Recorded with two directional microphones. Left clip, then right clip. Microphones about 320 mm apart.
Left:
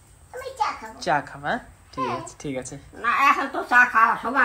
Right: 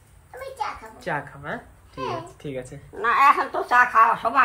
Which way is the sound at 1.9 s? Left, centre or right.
Centre.